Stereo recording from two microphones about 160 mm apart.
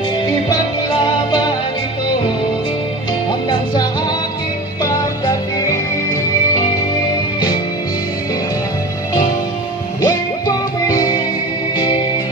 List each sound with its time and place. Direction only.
0.5 s music: 25° left (ahead or behind)
5.2 s music: 20° left (ahead or behind)
10.0 s music: 20° left (ahead or behind)